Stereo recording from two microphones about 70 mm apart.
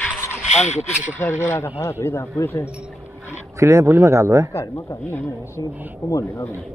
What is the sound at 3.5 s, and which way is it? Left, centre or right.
Speech, right.